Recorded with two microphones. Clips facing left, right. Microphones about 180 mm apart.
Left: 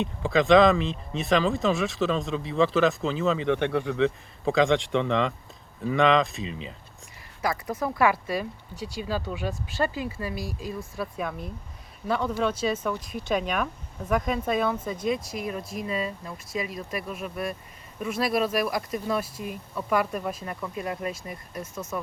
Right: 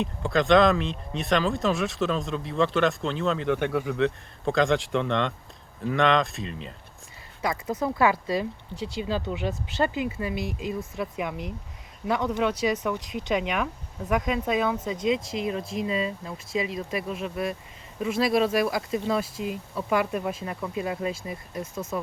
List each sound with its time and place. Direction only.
0.0 s speech: centre (ahead or behind)
7.4 s speech: 20° right (ahead or behind)